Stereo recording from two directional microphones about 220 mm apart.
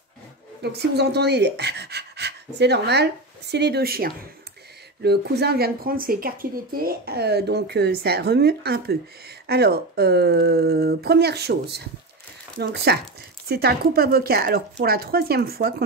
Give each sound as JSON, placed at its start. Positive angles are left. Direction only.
{"t": 0.6, "sound": "speech", "side_deg": -50}